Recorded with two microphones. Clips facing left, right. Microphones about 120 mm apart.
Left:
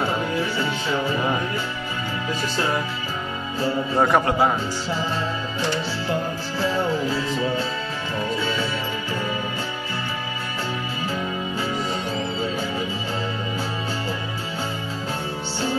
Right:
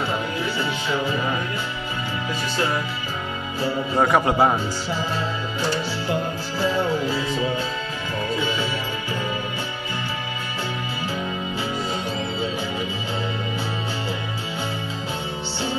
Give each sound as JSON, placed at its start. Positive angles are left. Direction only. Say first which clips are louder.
{"t": 3.9, "sound": "a man's voice", "louder": "even", "side_deg": 0}
{"t": 4.2, "sound": "speech", "louder": "right 1 dB", "side_deg": -20}